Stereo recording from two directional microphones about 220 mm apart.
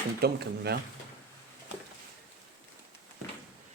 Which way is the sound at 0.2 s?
45° right (ahead or behind).